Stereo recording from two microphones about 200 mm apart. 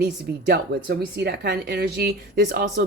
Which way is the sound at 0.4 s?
55° right (ahead or behind).